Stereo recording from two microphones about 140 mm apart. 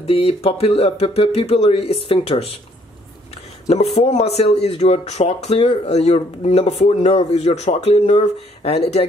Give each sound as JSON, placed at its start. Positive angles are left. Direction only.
{"t": 0.0, "sound": "speech", "side_deg": 45}
{"t": 3.6, "sound": "speech", "side_deg": 50}